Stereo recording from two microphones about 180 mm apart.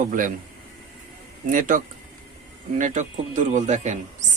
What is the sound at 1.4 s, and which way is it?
Speech, 45° right (ahead or behind).